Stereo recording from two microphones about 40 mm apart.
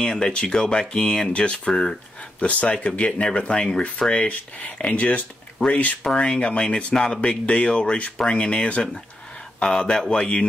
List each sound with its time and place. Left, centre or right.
0.0 s speech: left
2.4 s speech: left
4.1 s speech: left
6.0 s speech: left
9.7 s speech: centre